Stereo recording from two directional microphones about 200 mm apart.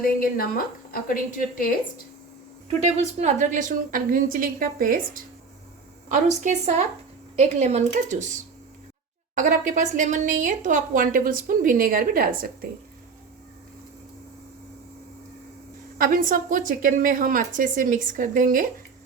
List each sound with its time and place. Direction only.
0.0 s a woman's voice: 45° left (ahead or behind)
3.2 s a woman's voice: 35° right (ahead or behind)
9.3 s a woman's voice: 40° right (ahead or behind)
16.0 s a woman's voice: 45° right (ahead or behind)